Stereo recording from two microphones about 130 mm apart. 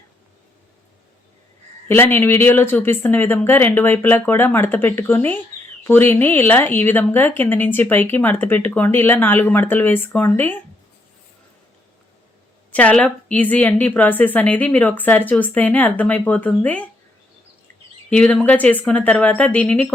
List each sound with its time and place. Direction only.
1.9 s a woman's voice: 15° left (ahead or behind)
12.7 s a woman's voice: 10° left (ahead or behind)
18.1 s a woman's voice: 10° left (ahead or behind)